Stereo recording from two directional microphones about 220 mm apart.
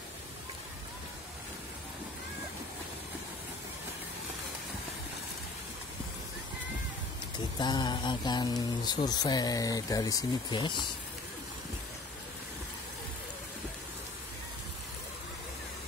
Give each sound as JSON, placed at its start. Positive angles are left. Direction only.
{"t": 7.5, "sound": "speech", "side_deg": 20}